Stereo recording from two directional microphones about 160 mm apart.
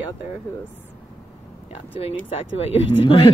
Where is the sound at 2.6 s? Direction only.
35° left (ahead or behind).